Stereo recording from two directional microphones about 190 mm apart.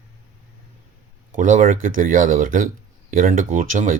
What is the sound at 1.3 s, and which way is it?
Speech, 40° right (ahead or behind).